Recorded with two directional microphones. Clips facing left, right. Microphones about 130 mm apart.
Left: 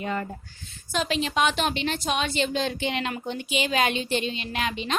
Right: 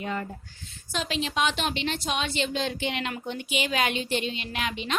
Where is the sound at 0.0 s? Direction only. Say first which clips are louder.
Left 2 dB; 50° left (ahead or behind).